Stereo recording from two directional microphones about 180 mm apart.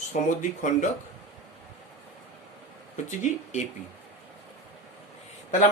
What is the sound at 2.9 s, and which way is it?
Speech, 45° left (ahead or behind).